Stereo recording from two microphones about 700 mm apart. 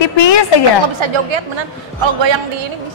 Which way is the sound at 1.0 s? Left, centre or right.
Right.